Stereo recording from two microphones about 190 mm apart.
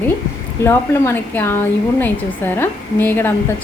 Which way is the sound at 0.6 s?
15° left (ahead or behind).